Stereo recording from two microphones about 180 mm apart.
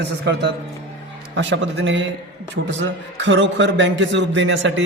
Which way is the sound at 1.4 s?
80° right.